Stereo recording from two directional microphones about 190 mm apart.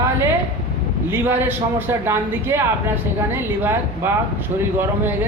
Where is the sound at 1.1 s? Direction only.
10° right (ahead or behind).